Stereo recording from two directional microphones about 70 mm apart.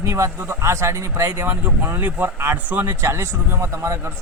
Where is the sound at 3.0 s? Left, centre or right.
Right.